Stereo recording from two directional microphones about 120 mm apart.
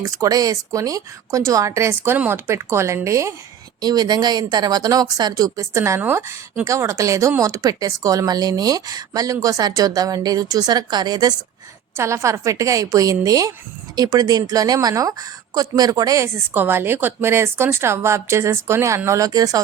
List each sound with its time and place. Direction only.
0.0 s speech: 30° right (ahead or behind)
11.9 s speech: 25° right (ahead or behind)